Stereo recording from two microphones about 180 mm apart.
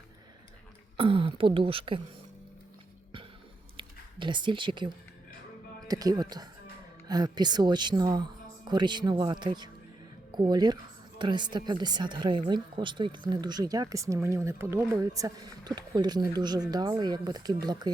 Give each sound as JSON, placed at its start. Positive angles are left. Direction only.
{"t": 0.9, "sound": "speech", "side_deg": -30}
{"t": 3.8, "sound": "speech", "side_deg": -25}